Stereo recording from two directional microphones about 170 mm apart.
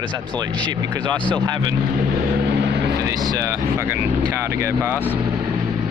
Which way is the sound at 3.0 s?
20° right (ahead or behind).